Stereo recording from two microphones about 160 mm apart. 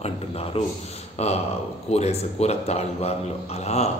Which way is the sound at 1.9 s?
40° left (ahead or behind).